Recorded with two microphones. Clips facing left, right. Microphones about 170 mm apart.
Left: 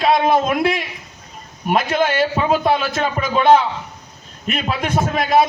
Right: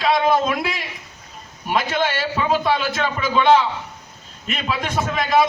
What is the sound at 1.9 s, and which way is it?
A man's voice, 50° left (ahead or behind).